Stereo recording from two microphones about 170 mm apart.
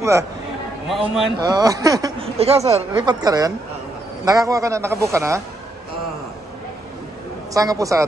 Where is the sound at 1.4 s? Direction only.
20° right (ahead or behind).